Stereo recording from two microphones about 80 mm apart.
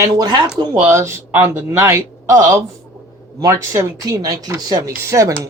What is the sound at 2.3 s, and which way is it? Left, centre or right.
Speech, right.